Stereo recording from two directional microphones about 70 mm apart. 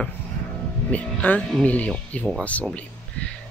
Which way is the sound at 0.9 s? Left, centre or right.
Left.